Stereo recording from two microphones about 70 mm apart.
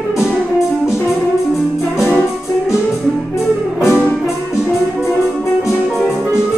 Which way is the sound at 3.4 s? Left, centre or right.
Left.